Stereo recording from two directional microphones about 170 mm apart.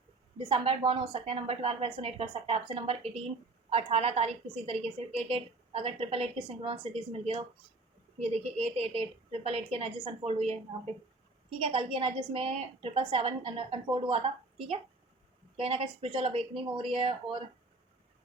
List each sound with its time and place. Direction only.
0.3 s a woman's voice: 30° right (ahead or behind)
15.6 s a woman's voice: 35° right (ahead or behind)